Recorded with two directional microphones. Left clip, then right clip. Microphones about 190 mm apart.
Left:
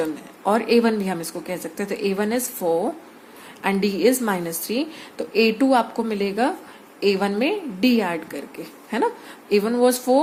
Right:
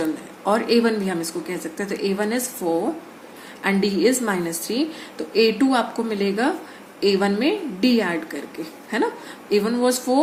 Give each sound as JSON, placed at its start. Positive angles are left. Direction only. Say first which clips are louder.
{"t": 0.0, "sound": "a woman's voice", "louder": "even", "side_deg": 35}
{"t": 9.5, "sound": "a woman's voice", "louder": "left 2 dB", "side_deg": 35}